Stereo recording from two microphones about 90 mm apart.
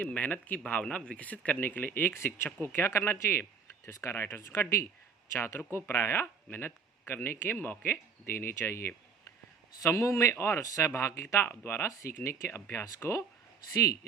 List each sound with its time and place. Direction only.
0.0 s speech: 15° left (ahead or behind); by 14.0 s 35° left (ahead or behind)